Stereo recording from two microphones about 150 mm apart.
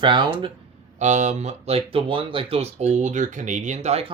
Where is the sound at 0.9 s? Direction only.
55° right (ahead or behind).